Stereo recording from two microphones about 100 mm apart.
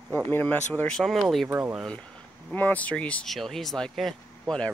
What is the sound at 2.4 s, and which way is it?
Speech, 15° left (ahead or behind).